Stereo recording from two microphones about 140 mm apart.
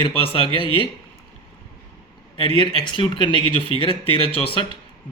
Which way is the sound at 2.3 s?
40° left (ahead or behind).